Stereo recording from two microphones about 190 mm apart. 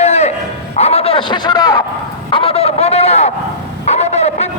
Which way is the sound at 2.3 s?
30° left (ahead or behind).